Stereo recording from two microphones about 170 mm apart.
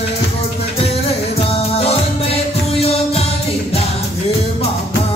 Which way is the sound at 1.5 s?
35° left (ahead or behind).